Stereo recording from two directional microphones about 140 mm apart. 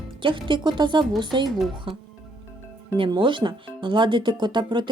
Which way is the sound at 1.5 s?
Centre (ahead or behind).